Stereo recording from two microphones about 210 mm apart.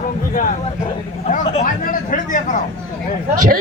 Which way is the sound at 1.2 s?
35° left (ahead or behind).